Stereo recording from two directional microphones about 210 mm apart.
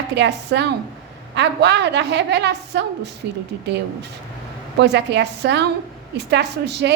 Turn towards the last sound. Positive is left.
turn(degrees=-55)  # may be behind; listen again after turning